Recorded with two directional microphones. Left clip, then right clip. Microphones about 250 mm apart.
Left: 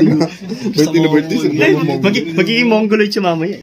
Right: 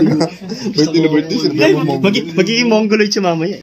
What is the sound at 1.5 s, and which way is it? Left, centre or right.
A man's voice, centre.